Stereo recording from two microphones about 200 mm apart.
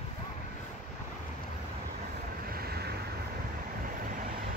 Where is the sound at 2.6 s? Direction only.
50° right (ahead or behind).